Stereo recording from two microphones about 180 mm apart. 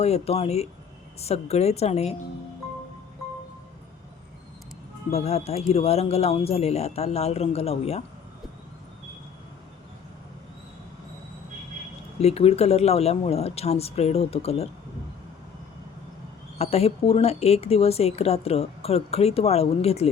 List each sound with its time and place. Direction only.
0.0 s speech: 35° left (ahead or behind)
5.1 s speech: 35° left (ahead or behind)
12.2 s speech: 35° left (ahead or behind)
16.6 s speech: 35° left (ahead or behind)